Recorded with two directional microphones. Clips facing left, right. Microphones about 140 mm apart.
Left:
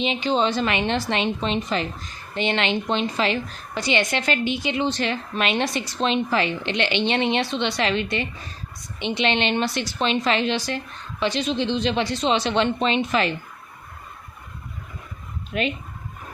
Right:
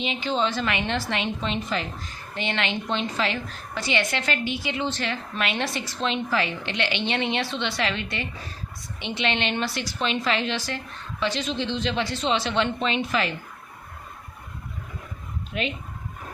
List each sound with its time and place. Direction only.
0.0 s a woman's voice: 20° left (ahead or behind)
15.5 s speech: 55° left (ahead or behind)